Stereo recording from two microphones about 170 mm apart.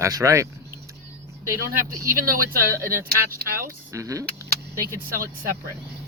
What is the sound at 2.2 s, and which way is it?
Speech, 60° right (ahead or behind).